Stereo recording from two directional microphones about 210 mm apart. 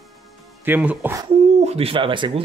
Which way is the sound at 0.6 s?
10° right (ahead or behind).